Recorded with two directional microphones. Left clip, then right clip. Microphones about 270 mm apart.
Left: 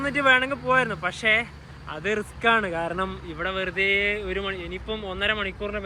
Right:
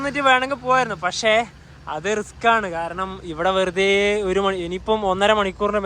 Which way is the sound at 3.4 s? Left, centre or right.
Centre.